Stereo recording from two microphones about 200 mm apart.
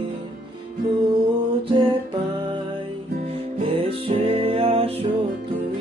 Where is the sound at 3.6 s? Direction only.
30° right (ahead or behind).